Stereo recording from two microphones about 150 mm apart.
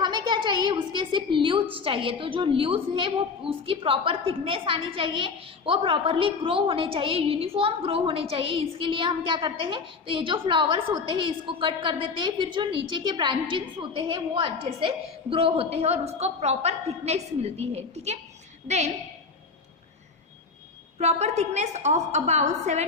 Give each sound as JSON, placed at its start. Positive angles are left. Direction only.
{"t": 0.0, "sound": "a sound", "side_deg": -30}
{"t": 1.7, "sound": "a woman's voice", "side_deg": -35}
{"t": 21.0, "sound": "a woman's voice", "side_deg": -45}